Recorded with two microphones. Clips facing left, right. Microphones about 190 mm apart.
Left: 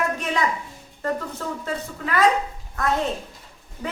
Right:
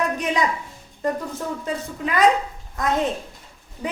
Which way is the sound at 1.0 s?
15° right (ahead or behind).